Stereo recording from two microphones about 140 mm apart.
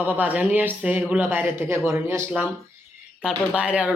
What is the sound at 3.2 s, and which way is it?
Speech, 5° right (ahead or behind).